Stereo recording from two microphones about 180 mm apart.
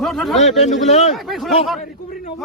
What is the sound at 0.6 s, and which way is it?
Speech, 40° left (ahead or behind).